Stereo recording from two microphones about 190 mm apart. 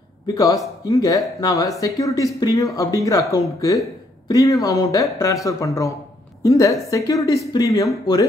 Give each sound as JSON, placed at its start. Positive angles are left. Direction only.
{"t": 0.3, "sound": "speech", "side_deg": 20}